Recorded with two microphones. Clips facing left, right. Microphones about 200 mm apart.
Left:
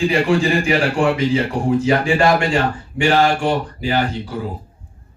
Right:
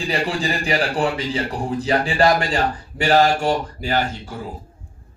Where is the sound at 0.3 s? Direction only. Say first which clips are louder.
Left 6 dB; 35° right (ahead or behind).